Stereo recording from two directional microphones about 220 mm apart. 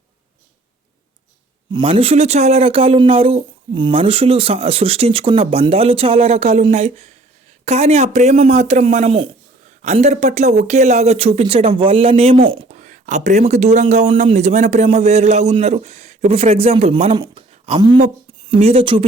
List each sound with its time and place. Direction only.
1.7 s speech: 25° right (ahead or behind)